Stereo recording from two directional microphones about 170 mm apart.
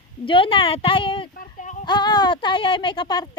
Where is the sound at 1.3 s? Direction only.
50° left (ahead or behind).